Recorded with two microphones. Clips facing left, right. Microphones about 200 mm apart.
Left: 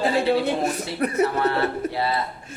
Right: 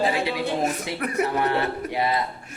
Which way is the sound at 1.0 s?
35° left (ahead or behind).